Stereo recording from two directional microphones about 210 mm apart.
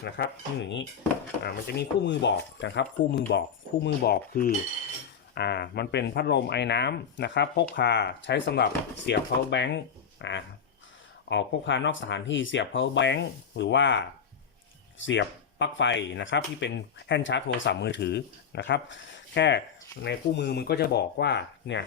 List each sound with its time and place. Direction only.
0.2 s speech: 55° left (ahead or behind)